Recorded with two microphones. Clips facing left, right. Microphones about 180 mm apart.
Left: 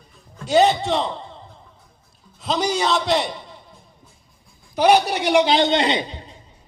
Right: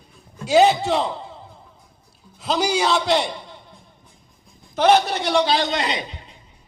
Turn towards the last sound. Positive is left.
turn(degrees=30)  # may be behind; listen again after turning